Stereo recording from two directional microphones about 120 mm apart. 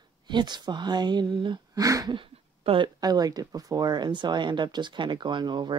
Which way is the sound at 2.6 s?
40° right (ahead or behind).